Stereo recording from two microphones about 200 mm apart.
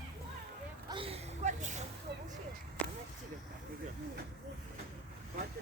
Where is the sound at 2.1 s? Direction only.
55° right (ahead or behind).